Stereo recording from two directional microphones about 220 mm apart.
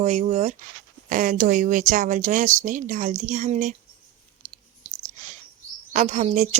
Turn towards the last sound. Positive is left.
turn(degrees=-30)  # may be behind; listen again after turning